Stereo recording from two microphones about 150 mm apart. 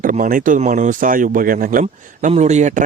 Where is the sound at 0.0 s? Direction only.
65° right (ahead or behind).